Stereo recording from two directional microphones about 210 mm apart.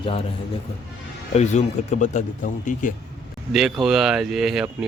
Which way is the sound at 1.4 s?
30° left (ahead or behind).